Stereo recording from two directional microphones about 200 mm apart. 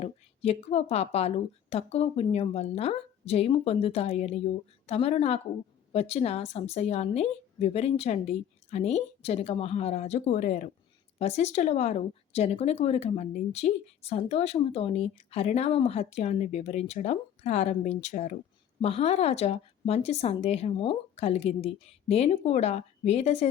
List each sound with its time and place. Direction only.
0.0 s a woman's voice: 30° left (ahead or behind)